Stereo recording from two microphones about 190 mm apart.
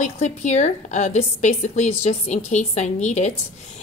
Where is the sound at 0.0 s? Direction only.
35° left (ahead or behind).